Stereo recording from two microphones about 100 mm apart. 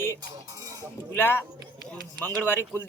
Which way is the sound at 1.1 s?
20° left (ahead or behind).